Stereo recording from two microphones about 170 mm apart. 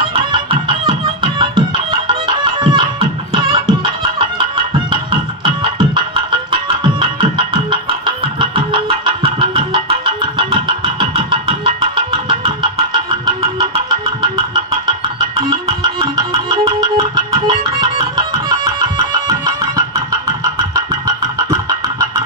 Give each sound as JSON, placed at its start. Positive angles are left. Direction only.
{"t": 0.3, "sound": "music", "side_deg": -30}
{"t": 5.1, "sound": "music", "side_deg": -30}
{"t": 13.6, "sound": "music", "side_deg": -25}